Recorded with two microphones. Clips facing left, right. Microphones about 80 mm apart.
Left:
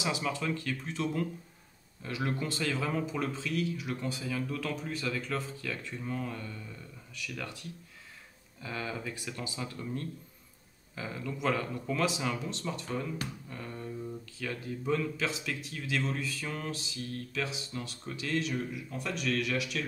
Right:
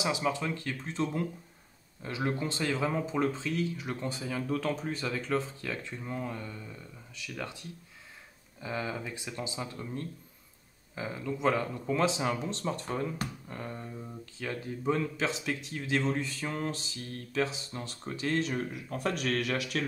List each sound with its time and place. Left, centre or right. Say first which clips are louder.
0.0 s speech: right 2 dB; right